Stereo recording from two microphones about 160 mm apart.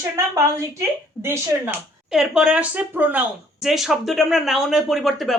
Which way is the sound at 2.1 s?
5° right (ahead or behind).